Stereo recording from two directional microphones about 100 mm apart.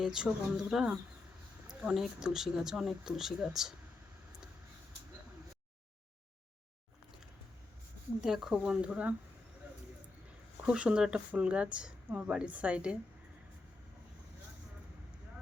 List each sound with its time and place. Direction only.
0.0 s speech: 5° right (ahead or behind)
8.2 s speech: 5° right (ahead or behind)
10.7 s speech: 10° right (ahead or behind)